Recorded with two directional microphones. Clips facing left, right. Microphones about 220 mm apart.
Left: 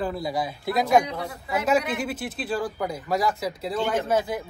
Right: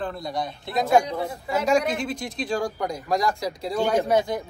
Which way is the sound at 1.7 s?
5° left (ahead or behind).